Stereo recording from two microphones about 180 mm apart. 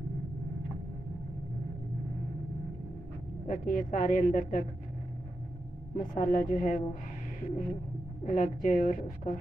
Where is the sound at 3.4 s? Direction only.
45° left (ahead or behind).